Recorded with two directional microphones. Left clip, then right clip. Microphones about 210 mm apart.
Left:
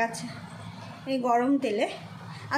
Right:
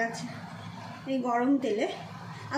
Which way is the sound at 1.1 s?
40° left (ahead or behind).